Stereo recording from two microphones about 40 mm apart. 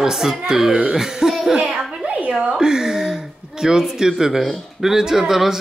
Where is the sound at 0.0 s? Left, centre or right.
Centre.